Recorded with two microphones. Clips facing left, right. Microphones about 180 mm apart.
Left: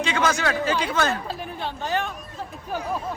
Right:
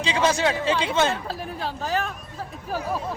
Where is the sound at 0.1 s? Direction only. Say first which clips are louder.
Right 4 dB; 30° right (ahead or behind).